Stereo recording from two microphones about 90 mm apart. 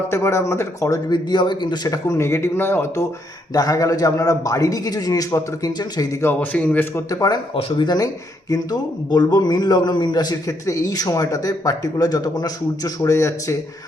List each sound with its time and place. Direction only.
0.1 s a man's voice: 30° left (ahead or behind)
1.0 s a man's voice: 55° left (ahead or behind); by 3.1 s 30° left (ahead or behind)
3.5 s a man's voice: 45° left (ahead or behind)
6.2 s speech: 20° left (ahead or behind)
6.9 s a man's voice: 40° left (ahead or behind)
7.5 s speech: 60° left (ahead or behind)
7.9 s speech: 45° left (ahead or behind)